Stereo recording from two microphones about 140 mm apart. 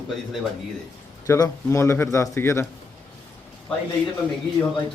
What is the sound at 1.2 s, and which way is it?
Speech, 25° left (ahead or behind).